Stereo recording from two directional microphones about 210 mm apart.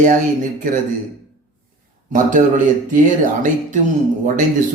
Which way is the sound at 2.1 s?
35° right (ahead or behind).